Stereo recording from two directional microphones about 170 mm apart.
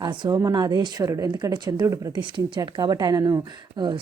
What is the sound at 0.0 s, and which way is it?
Speech, 25° right (ahead or behind).